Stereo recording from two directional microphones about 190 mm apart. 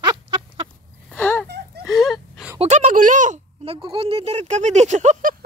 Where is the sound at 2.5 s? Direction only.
40° right (ahead or behind).